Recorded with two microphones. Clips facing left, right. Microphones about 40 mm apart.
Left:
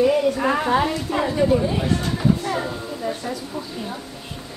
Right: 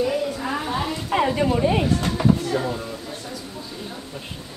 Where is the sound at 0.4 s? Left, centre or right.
Left.